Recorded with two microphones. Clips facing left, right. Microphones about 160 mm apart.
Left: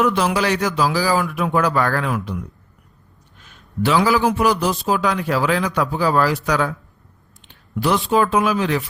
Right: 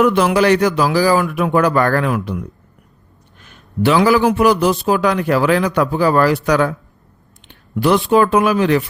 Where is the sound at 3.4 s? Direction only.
60° right (ahead or behind).